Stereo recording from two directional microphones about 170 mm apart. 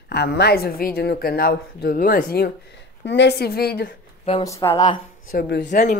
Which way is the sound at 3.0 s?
90° left.